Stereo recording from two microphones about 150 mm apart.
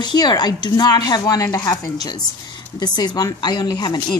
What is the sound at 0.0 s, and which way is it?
A woman's voice, 30° left (ahead or behind).